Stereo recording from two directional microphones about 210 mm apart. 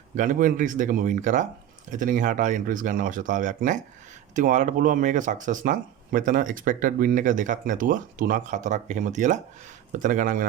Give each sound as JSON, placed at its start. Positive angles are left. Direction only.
{"t": 0.2, "sound": "speech", "side_deg": -40}